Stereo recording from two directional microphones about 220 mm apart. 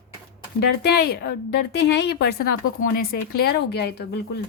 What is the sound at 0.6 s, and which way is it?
A woman's voice, 45° left (ahead or behind).